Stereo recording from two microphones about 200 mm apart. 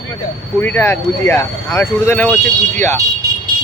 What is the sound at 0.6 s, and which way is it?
Speech, 10° left (ahead or behind).